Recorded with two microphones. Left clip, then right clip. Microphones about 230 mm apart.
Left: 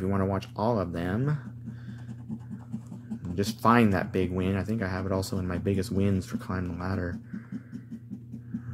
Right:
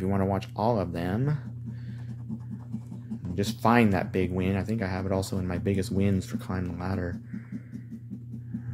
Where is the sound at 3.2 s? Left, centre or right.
Centre.